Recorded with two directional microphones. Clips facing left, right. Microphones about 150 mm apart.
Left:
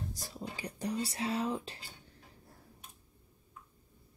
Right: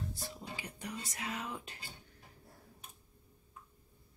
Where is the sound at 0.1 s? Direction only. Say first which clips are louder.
Left 2 dB; 40° left (ahead or behind).